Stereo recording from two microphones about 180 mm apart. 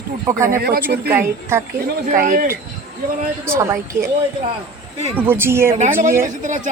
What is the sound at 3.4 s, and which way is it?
Speech, 15° right (ahead or behind).